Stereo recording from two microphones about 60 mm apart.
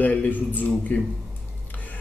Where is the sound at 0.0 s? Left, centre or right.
Left.